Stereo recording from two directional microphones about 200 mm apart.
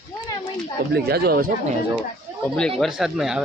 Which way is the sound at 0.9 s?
55° right (ahead or behind).